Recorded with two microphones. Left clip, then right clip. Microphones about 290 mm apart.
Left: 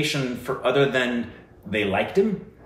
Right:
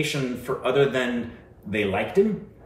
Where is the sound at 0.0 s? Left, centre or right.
Centre.